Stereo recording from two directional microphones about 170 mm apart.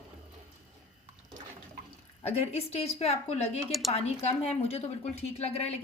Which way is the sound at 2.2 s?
35° left (ahead or behind).